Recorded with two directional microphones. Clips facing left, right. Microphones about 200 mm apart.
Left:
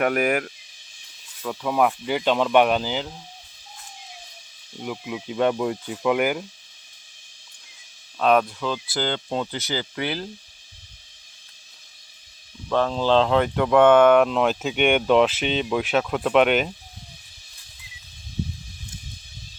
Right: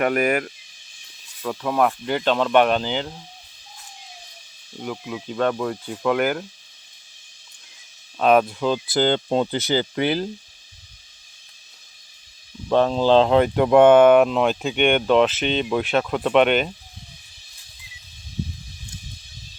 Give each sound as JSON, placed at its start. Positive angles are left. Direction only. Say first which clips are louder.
{"t": 0.0, "sound": "speech", "louder": "right 1 dB", "side_deg": 0}
{"t": 4.8, "sound": "speech", "louder": "right 1 dB", "side_deg": 10}
{"t": 8.2, "sound": "speech", "louder": "right 2 dB", "side_deg": -10}
{"t": 8.6, "sound": "speech", "louder": "right 6 dB", "side_deg": -20}
{"t": 12.6, "sound": "speech", "louder": "right 4 dB", "side_deg": -20}